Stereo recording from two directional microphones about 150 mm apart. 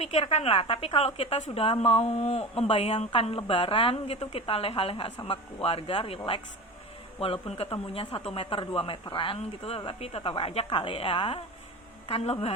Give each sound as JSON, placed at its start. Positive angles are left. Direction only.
{"t": 0.0, "sound": "a woman's voice", "side_deg": 45}